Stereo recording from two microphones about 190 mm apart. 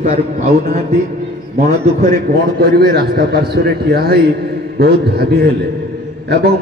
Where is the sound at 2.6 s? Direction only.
55° right (ahead or behind).